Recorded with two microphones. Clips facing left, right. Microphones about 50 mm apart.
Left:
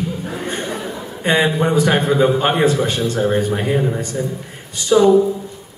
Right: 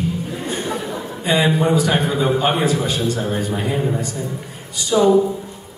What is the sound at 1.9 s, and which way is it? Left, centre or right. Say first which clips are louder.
A man's voice: left 3 dB; left.